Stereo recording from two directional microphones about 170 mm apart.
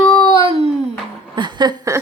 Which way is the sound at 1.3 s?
25° right (ahead or behind).